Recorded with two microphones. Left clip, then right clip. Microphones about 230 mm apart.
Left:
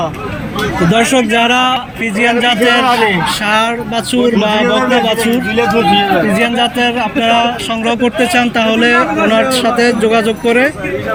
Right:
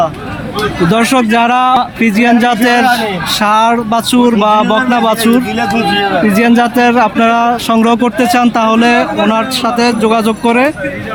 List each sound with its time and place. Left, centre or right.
0.9 s speech: centre
6.3 s speech: centre